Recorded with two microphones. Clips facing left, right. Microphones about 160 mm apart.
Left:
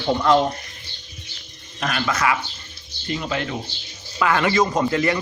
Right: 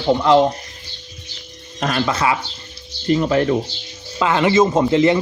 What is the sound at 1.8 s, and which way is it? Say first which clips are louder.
Speech: right 4 dB; 35° right (ahead or behind).